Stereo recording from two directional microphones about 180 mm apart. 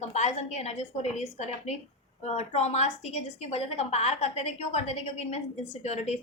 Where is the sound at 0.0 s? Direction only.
40° left (ahead or behind).